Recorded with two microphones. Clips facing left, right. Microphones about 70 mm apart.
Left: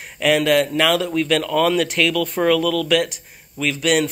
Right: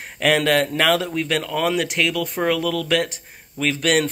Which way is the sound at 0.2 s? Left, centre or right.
Right.